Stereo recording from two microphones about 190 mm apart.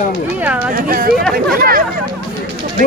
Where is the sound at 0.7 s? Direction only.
50° right (ahead or behind).